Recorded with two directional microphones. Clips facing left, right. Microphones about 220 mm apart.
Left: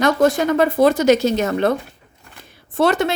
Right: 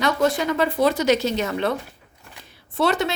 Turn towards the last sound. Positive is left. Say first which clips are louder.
# left 4 dB
turn(degrees=50)  # may be behind; listen again after turning